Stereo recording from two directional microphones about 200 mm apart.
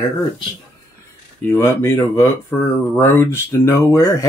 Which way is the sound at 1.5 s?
10° left (ahead or behind).